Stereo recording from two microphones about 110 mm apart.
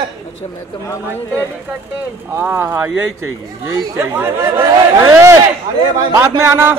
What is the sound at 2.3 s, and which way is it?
Speech, 20° right (ahead or behind).